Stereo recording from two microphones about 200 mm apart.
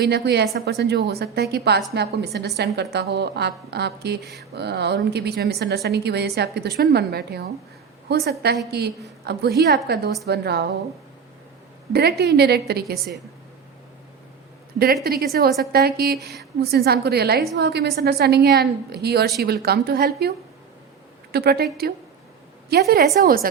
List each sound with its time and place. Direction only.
0.0 s a woman's voice: 55° right (ahead or behind)
11.9 s a woman's voice: 55° right (ahead or behind)
15.0 s a woman's voice: 50° right (ahead or behind)
21.3 s a woman's voice: 50° right (ahead or behind)